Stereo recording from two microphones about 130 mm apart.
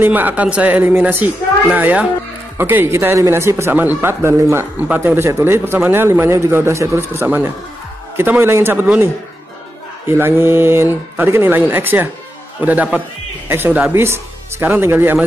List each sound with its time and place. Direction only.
0.0 s speech: 15° right (ahead or behind)